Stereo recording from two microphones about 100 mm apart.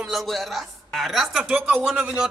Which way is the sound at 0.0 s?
Centre (ahead or behind).